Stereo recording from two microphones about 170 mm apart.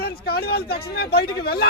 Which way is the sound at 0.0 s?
65° left (ahead or behind).